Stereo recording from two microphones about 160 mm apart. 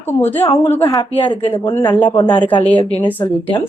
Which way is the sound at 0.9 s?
35° left (ahead or behind).